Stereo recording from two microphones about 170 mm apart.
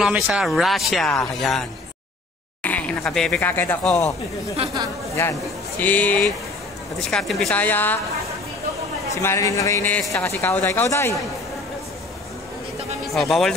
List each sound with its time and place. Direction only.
0.0 s speech: 5° right (ahead or behind)
5.8 s speech: 10° left (ahead or behind)
9.1 s speech: 15° left (ahead or behind)
13.0 s speech: centre (ahead or behind)